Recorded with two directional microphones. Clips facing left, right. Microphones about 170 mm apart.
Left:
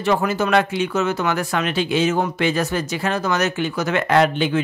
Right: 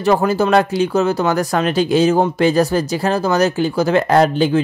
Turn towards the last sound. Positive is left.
turn(degrees=-35)  # may be behind; listen again after turning